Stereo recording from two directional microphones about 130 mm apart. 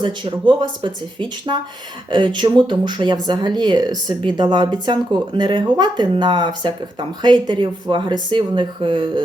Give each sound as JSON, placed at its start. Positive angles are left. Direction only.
{"t": 0.0, "sound": "speech", "side_deg": -40}